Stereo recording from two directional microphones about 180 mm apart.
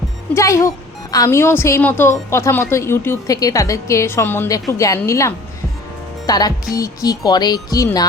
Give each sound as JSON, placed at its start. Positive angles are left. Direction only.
{"t": 0.3, "sound": "a woman's voice", "side_deg": 15}